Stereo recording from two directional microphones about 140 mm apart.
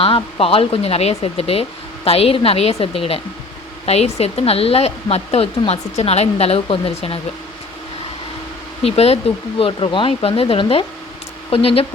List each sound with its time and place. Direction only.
0.0 s speech: 40° left (ahead or behind)
8.8 s speech: 45° left (ahead or behind)